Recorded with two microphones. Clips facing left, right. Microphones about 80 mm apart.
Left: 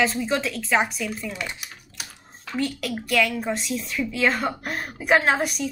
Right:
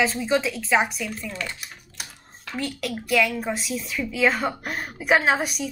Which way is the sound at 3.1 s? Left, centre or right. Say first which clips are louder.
Even; centre.